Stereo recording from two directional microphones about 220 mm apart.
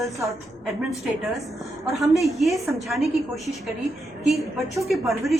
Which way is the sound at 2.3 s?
Centre (ahead or behind).